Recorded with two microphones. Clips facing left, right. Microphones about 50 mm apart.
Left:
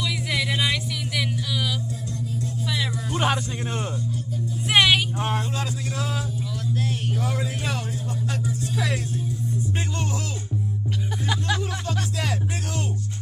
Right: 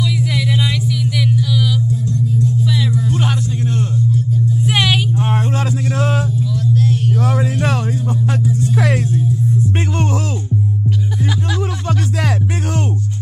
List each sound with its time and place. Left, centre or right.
0.2 s music: centre
4.6 s vehicle: centre
5.5 s a sound: right
6.7 s music: centre
7.2 s music: right
8.3 s music: right
11.9 s music: right